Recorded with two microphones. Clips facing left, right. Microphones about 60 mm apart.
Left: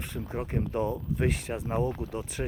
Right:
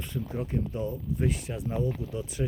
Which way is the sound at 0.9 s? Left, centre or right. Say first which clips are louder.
Left 1 dB; left.